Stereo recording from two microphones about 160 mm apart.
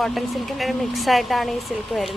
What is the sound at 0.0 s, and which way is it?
A woman's voice, centre (ahead or behind).